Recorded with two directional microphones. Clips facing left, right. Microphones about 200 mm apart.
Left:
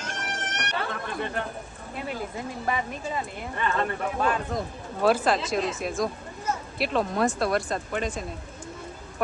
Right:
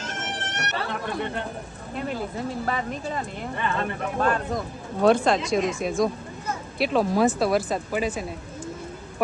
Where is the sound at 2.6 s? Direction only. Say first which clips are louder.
Right 1 dB; 10° left (ahead or behind).